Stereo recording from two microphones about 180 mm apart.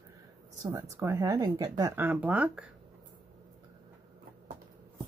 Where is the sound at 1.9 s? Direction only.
10° right (ahead or behind).